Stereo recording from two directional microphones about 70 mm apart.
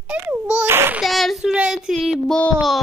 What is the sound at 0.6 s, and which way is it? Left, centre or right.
Speech, right.